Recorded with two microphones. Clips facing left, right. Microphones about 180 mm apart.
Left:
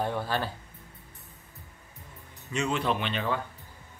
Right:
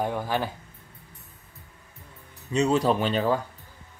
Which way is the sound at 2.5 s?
35° right (ahead or behind).